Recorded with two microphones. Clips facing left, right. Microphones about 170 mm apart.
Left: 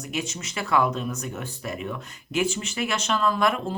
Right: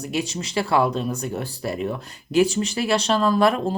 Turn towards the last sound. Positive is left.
turn(degrees=-35)  # may be behind; listen again after turning